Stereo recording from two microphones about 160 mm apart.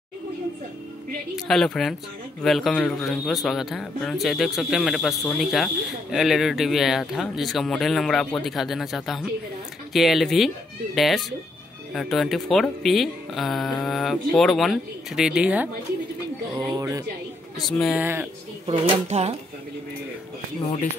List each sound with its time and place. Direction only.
1.3 s a man's voice: centre (ahead or behind)
16.5 s speech: 25° right (ahead or behind)
17.6 s a man's voice: centre (ahead or behind)
18.0 s speech: 15° right (ahead or behind)
18.7 s speech: 40° right (ahead or behind)